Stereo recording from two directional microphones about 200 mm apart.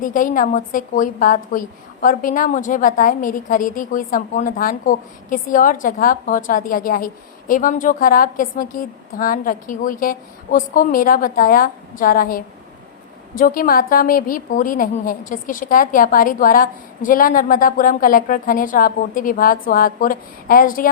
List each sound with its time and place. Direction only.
0.0 s a woman's voice: 40° left (ahead or behind)